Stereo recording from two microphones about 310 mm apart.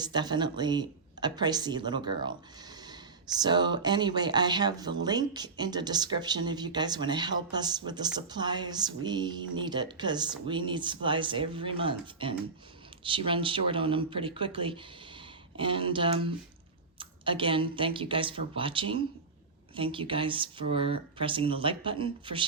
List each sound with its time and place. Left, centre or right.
0.0 s speech: centre